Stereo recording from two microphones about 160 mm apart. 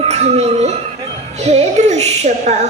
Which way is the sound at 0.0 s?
40° right (ahead or behind).